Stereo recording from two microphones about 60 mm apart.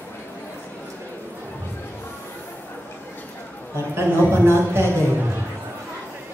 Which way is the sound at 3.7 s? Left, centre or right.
Right.